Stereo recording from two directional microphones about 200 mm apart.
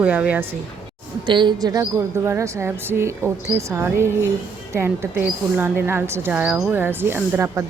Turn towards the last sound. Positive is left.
turn(degrees=-15)  # may be behind; listen again after turning